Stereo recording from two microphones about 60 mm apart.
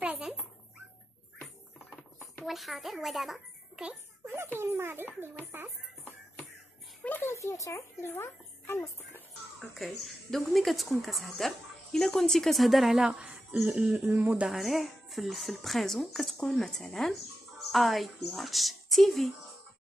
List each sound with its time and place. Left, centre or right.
2.4 s a child's voice: centre
4.3 s a child's voice: right
5.5 s a sound: right
7.0 s a sound: left
7.3 s speech: left
8.0 s speech: left
9.6 s speech: centre
13.2 s a sound: right
13.7 s speech: centre
14.1 s speech: right
14.5 s speech: centre